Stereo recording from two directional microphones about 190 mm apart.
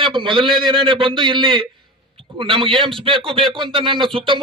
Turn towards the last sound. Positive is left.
turn(degrees=-25)  # may be behind; listen again after turning